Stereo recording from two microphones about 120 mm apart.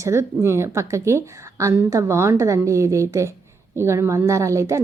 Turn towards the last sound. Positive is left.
turn(degrees=-25)  # may be behind; listen again after turning